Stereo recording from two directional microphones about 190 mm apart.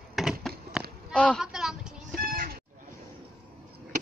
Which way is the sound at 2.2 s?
50° right (ahead or behind).